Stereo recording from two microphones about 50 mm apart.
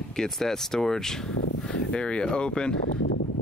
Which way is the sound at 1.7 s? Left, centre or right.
Left.